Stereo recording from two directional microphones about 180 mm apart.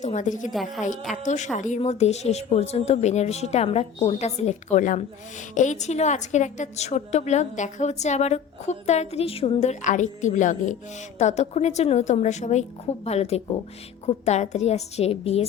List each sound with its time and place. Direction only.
0.0 s a woman's voice: 40° left (ahead or behind)
0.5 s a woman's voice: centre (ahead or behind)
1.1 s a woman's voice: 40° left (ahead or behind)